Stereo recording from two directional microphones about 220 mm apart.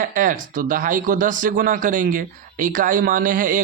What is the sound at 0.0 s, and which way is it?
Speech, 40° right (ahead or behind).